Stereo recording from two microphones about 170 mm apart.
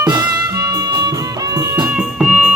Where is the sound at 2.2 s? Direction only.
5° right (ahead or behind).